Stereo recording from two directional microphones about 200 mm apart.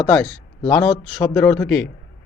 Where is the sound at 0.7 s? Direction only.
15° left (ahead or behind).